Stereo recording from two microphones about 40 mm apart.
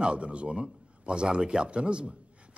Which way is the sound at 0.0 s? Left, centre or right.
Right.